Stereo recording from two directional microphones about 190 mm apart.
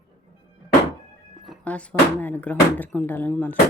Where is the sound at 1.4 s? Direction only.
5° left (ahead or behind).